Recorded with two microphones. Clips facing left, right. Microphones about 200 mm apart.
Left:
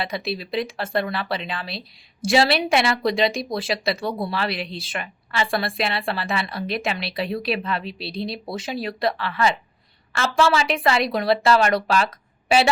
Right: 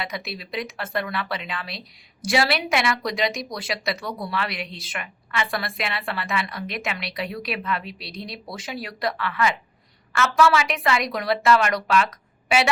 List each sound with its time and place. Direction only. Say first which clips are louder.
0.0 s a woman's voice: left 5 dB; 30° left (ahead or behind)